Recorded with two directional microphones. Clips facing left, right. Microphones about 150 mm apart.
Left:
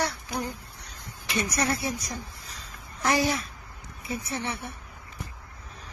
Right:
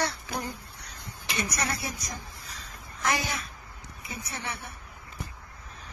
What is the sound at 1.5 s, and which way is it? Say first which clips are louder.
Speech: left 5 dB; 30° left (ahead or behind).